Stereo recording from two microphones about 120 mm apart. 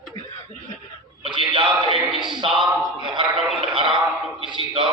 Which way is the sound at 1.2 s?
45° right (ahead or behind).